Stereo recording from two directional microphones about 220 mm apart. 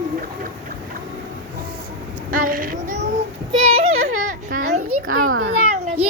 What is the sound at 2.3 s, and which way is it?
Speech, 40° right (ahead or behind).